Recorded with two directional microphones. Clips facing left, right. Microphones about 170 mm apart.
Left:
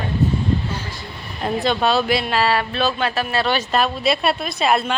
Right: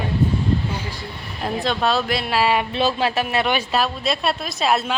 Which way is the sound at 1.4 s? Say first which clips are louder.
Left 2 dB; centre (ahead or behind).